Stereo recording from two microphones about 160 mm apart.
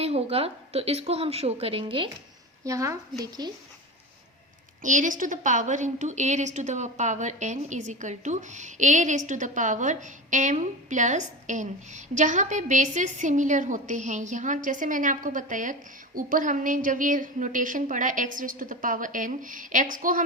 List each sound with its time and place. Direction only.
0.0 s a woman's voice: 40° right (ahead or behind)
2.6 s a woman's voice: 20° right (ahead or behind)
4.8 s a woman's voice: 55° right (ahead or behind)